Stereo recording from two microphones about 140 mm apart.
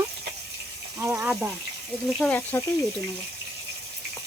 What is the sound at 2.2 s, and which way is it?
Speech, 10° left (ahead or behind).